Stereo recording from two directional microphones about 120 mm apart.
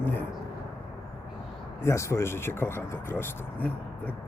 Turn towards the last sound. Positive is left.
turn(degrees=15)  # may be behind; listen again after turning